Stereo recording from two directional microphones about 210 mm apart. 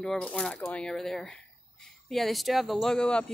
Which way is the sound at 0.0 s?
5° left (ahead or behind).